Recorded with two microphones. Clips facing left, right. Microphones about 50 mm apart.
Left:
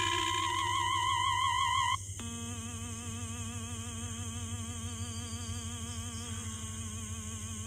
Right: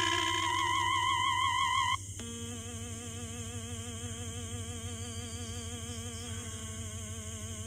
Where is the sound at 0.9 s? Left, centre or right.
Right.